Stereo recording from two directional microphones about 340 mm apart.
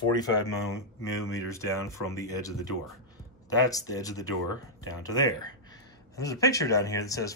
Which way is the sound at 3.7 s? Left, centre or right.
Centre.